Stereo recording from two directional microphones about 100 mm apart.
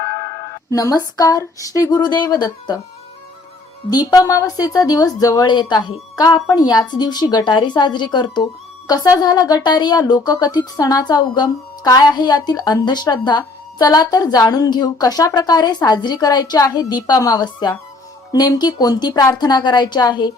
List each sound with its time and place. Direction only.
0.7 s speech: 35° left (ahead or behind)
3.8 s a woman's voice: 40° left (ahead or behind)